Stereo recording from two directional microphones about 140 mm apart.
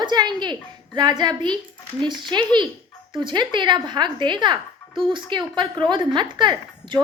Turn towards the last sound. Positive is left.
turn(degrees=-35)  # may be behind; listen again after turning